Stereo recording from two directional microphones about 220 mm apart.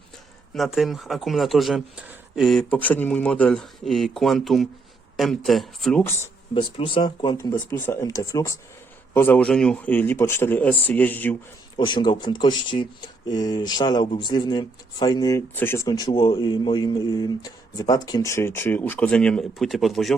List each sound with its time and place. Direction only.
0.5 s speech: centre (ahead or behind)
6.5 s speech: 25° left (ahead or behind); by 11.3 s 10° left (ahead or behind)
11.8 s speech: 20° left (ahead or behind); by 20.1 s centre (ahead or behind)